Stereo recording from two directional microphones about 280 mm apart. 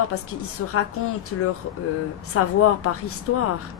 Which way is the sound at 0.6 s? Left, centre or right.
Left.